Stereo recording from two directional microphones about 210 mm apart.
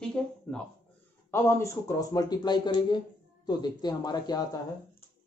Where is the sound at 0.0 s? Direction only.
5° left (ahead or behind).